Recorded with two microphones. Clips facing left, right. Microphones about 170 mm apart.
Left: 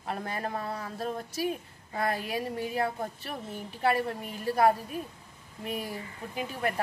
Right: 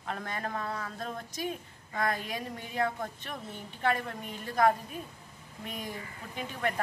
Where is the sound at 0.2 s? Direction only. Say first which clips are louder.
Left 2 dB; 30° left (ahead or behind).